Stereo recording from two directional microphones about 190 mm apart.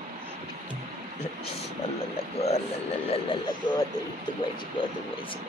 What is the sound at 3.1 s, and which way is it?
Speech, 25° left (ahead or behind).